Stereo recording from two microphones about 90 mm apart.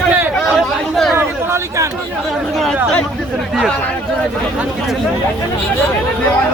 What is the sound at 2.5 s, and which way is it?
Speech, centre (ahead or behind).